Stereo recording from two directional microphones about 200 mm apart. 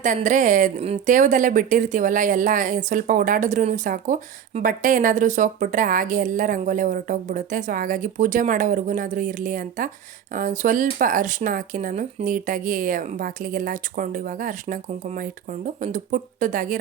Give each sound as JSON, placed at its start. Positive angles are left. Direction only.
{"t": 0.0, "sound": "a woman's voice", "side_deg": -40}